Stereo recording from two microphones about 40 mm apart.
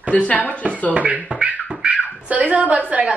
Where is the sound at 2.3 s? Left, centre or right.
Right.